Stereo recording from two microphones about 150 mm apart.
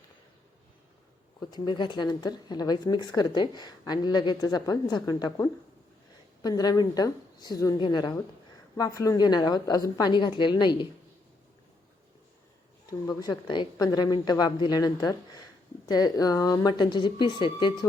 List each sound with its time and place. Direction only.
1.5 s speech: 30° left (ahead or behind)
12.9 s speech: 25° left (ahead or behind)